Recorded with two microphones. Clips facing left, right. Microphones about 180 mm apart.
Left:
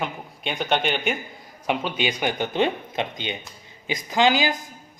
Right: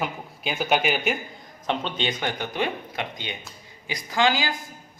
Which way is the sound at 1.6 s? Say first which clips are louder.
Left 2 dB; 10° left (ahead or behind).